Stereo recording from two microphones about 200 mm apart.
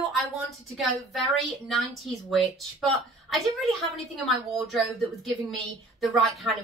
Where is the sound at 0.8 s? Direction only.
Centre (ahead or behind).